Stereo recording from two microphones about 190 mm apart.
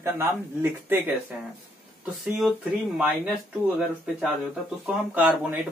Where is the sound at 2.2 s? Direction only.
Centre (ahead or behind).